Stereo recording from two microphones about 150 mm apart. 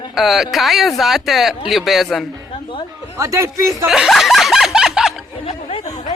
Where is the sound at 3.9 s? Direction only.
5° right (ahead or behind).